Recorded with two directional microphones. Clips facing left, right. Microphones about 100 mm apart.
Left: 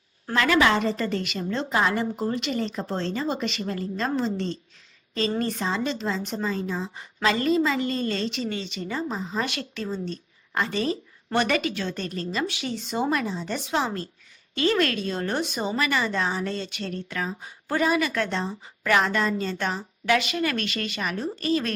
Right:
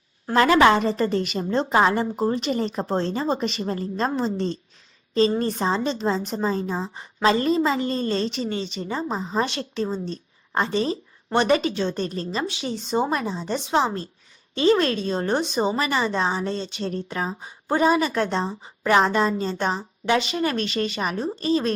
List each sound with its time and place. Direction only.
0.3 s a woman's voice: 30° right (ahead or behind)